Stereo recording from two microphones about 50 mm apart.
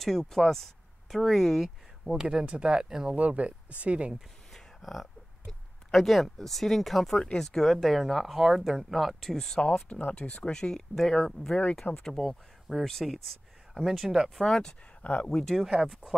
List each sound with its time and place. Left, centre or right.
0.0 s speech: centre
2.0 s speech: centre
3.2 s speech: right
4.6 s speech: centre
9.8 s speech: left
15.0 s speech: left
15.2 s speech: centre
15.9 s speech: centre